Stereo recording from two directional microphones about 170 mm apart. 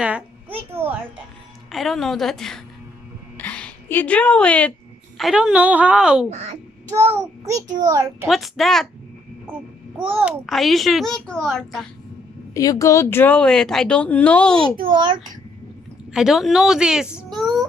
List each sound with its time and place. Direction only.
0.0 s a sound: 10° right (ahead or behind)
1.7 s a woman's voice: centre (ahead or behind)
3.3 s a sound: 10° left (ahead or behind)
5.1 s a woman's voice: centre (ahead or behind)
6.3 s speech: 35° right (ahead or behind)
7.1 s child singing: 15° right (ahead or behind)
7.9 s a child's voice: 20° right (ahead or behind)
8.3 s a woman's voice: centre (ahead or behind)
9.5 s child singing: 10° right (ahead or behind)
10.4 s a woman's voice: centre (ahead or behind)
12.5 s speech: 20° left (ahead or behind)
14.8 s a child's voice: 25° right (ahead or behind)
16.1 s a woman's voice: 5° right (ahead or behind)
17.2 s child singing: centre (ahead or behind)